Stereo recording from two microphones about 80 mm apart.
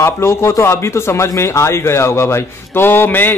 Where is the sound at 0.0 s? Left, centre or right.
Left.